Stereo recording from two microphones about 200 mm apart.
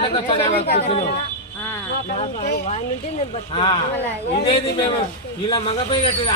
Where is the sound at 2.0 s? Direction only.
35° left (ahead or behind).